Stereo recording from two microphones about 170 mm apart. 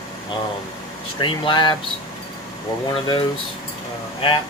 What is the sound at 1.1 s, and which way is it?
Speech, 30° left (ahead or behind).